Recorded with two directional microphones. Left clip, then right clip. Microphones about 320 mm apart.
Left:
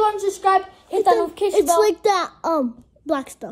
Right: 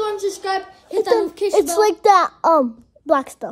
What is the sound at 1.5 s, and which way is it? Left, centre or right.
A child's voice, centre.